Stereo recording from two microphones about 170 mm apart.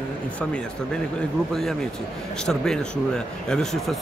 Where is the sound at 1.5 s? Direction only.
Centre (ahead or behind).